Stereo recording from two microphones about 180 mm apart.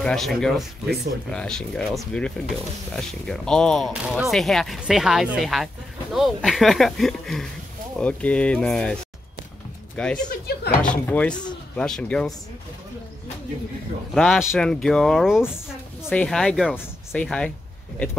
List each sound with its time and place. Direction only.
0.0 s speech: centre (ahead or behind)
9.9 s speech: 5° left (ahead or behind)
10.2 s speech: 55° left (ahead or behind)
10.8 s speech: 5° left (ahead or behind)
14.1 s speech: centre (ahead or behind)